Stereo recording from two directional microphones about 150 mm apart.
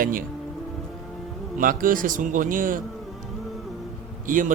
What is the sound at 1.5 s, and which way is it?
A man's voice, 65° right (ahead or behind).